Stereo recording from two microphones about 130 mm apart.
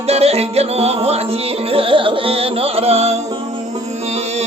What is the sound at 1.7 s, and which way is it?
Music, 40° right (ahead or behind).